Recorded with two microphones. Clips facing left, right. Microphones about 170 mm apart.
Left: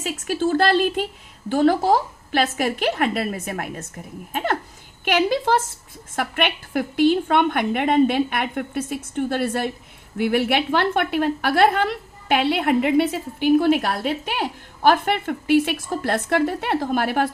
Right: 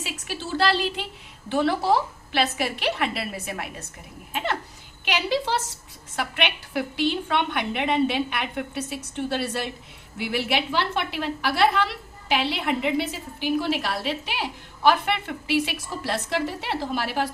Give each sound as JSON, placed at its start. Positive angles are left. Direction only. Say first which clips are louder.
{"t": 0.0, "sound": "a woman's voice", "louder": "left 11 dB", "side_deg": 45}